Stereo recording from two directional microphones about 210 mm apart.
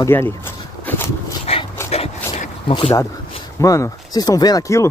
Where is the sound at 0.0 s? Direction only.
10° left (ahead or behind).